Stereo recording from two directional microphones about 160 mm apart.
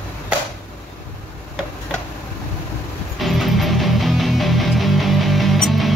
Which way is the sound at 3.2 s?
Centre (ahead or behind).